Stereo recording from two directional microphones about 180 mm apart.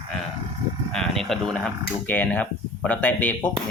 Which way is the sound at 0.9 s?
Centre (ahead or behind).